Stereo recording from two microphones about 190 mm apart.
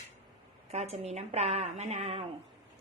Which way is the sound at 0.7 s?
35° right (ahead or behind).